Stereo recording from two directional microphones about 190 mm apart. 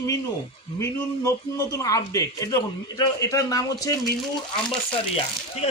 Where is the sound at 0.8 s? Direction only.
15° left (ahead or behind).